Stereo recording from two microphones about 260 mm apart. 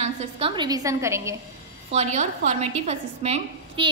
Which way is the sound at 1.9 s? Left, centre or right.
Right.